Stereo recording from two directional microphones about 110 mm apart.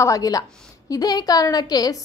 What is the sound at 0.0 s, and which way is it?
A woman's voice, 30° left (ahead or behind).